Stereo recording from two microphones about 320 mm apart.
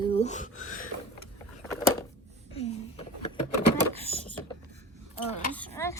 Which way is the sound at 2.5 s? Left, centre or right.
Centre.